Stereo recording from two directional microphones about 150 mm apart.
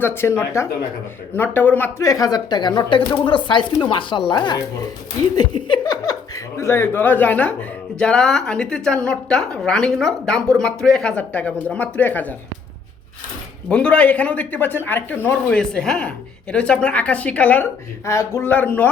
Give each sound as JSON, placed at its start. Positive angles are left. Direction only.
{"t": 0.0, "sound": "speech", "side_deg": 15}
{"t": 5.4, "sound": "a sound", "side_deg": 30}
{"t": 7.9, "sound": "a woman's voice", "side_deg": 5}
{"t": 13.7, "sound": "speech", "side_deg": 5}